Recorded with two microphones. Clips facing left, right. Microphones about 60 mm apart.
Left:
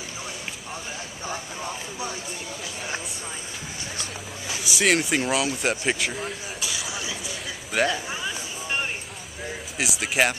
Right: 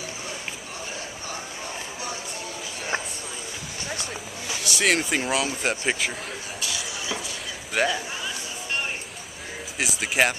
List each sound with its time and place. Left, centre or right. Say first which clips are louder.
4.6 s speech: left 1 dB; centre
6.6 s a sound: left 1 dB; centre
7.7 s speech: even; centre
9.8 s speech: even; centre